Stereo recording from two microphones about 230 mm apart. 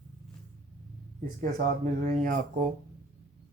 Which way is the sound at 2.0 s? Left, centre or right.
Right.